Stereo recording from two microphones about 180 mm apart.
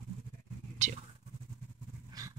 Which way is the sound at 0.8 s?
40° right (ahead or behind).